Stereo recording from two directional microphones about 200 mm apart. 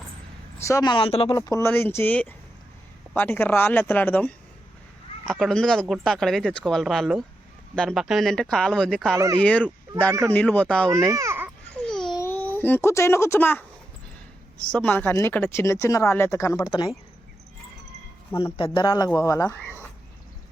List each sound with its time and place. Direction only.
0.6 s speech: 15° left (ahead or behind)
1.3 s speech: 15° left (ahead or behind)
9.1 s speech: 15° right (ahead or behind)
9.4 s speech: 5° left (ahead or behind)
10.1 s speech: 15° right (ahead or behind)
10.3 s speech: 5° left (ahead or behind)
10.9 s babbling: 15° right (ahead or behind)
12.0 s speech: 15° left (ahead or behind)
18.5 s speech: 25° left (ahead or behind)